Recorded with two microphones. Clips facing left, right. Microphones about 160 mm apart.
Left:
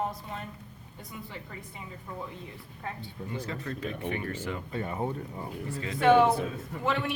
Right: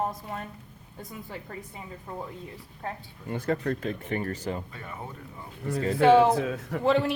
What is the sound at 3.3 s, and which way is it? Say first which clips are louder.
Speech: right 9 dB; 55° right (ahead or behind).